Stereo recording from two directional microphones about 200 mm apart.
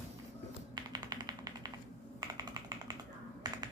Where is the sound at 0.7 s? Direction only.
20° right (ahead or behind).